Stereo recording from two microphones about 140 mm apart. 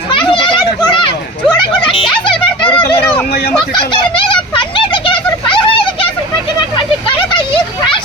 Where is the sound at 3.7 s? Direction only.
35° left (ahead or behind).